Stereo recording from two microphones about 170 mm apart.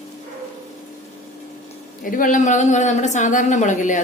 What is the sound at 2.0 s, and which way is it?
A woman's voice, 50° left (ahead or behind).